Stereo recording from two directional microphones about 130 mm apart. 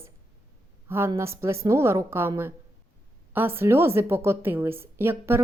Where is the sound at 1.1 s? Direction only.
20° right (ahead or behind).